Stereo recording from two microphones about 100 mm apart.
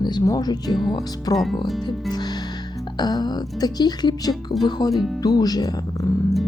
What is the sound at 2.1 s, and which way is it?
Music, 45° left (ahead or behind).